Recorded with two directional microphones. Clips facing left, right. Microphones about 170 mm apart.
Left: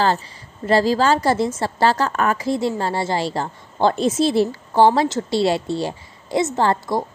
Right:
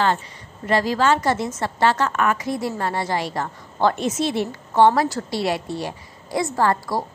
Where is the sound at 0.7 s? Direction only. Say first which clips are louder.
Left 3 dB; 30° left (ahead or behind).